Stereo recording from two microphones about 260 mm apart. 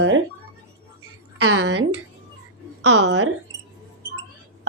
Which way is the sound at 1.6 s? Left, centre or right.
Right.